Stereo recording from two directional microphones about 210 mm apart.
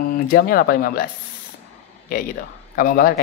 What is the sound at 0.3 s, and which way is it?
Speech, 45° left (ahead or behind).